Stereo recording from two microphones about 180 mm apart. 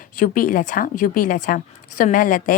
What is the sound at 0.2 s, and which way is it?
A woman's voice, 50° left (ahead or behind).